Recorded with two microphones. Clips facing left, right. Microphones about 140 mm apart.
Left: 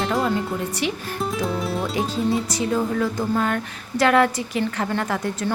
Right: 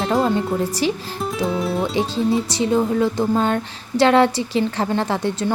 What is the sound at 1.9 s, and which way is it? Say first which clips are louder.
Speech: right 2 dB; 30° right (ahead or behind).